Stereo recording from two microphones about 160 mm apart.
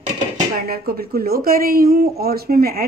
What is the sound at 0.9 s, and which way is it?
Speech, 70° right (ahead or behind).